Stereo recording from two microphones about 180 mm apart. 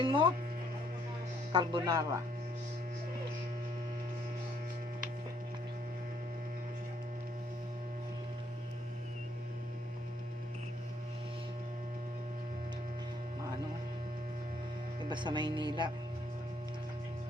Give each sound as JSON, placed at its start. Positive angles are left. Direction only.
{"t": 0.0, "sound": "speech", "side_deg": -30}
{"t": 1.5, "sound": "speech", "side_deg": -25}
{"t": 15.1, "sound": "speech", "side_deg": -25}